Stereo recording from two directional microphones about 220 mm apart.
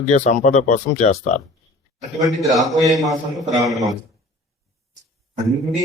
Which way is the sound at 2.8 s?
15° right (ahead or behind).